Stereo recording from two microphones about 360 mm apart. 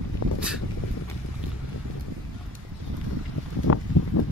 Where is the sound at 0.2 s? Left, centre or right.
Left.